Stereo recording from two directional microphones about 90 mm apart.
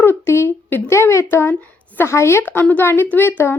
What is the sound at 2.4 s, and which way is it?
Speech, 20° left (ahead or behind).